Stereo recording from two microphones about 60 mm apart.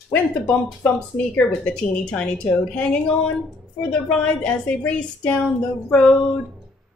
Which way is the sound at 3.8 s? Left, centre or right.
Centre.